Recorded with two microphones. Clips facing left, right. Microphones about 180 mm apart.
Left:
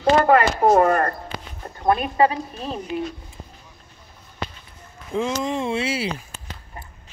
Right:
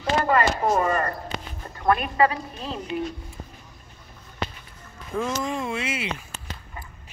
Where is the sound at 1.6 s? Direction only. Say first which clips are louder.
Left 7 dB; 35° left (ahead or behind).